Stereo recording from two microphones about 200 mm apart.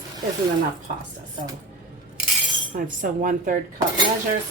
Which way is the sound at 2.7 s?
40° right (ahead or behind).